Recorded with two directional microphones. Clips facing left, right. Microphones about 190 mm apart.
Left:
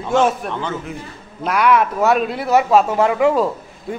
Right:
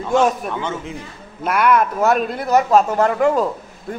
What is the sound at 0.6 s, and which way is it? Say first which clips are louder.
Speech: even; 20° right (ahead or behind).